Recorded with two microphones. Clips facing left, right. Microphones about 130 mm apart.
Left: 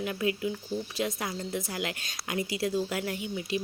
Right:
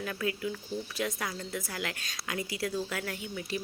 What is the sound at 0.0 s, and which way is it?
A woman's voice, 20° left (ahead or behind).